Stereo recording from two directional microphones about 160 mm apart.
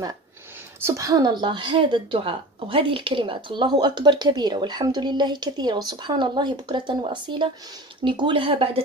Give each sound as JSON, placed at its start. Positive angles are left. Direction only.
{"t": 0.8, "sound": "a woman's voice", "side_deg": -20}